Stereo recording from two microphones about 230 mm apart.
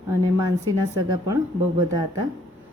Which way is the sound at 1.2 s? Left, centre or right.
Centre.